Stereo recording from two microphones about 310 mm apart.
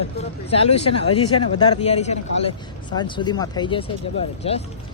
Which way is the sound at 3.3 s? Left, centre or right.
Centre.